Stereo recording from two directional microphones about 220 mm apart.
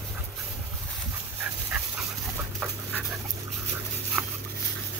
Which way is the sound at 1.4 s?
5° right (ahead or behind).